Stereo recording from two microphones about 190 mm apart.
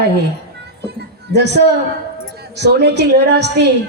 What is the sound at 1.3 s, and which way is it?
A woman's voice, 60° right (ahead or behind).